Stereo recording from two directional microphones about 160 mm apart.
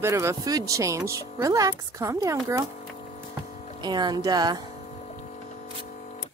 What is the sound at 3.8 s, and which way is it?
Speech, 25° right (ahead or behind).